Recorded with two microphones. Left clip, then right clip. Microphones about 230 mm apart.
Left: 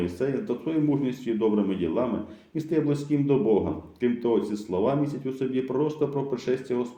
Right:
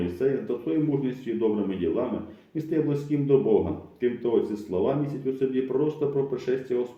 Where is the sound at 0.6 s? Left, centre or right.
Left.